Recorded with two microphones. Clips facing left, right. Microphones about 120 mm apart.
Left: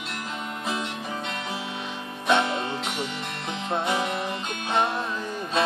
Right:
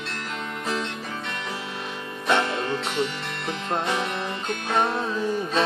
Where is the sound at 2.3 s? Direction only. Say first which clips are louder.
Even; 15° left (ahead or behind).